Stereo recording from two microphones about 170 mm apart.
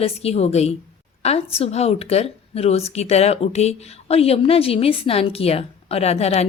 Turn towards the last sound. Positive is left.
turn(degrees=40)  # may be behind; listen again after turning